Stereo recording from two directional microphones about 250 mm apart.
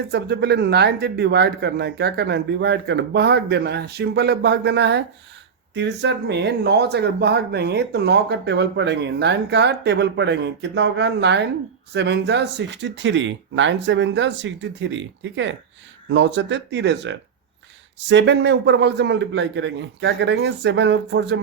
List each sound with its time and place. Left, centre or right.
0.1 s speech: right